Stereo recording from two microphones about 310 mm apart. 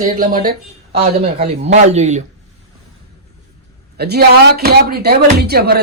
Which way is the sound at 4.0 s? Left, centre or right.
Right.